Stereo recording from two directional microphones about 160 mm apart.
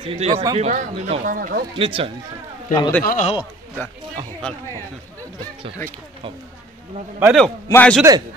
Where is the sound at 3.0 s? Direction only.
60° left (ahead or behind).